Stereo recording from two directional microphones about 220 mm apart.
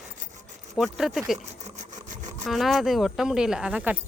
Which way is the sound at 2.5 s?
Centre (ahead or behind).